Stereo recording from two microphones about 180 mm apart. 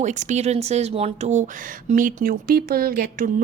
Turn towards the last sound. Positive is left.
turn(degrees=-50)  # may be behind; listen again after turning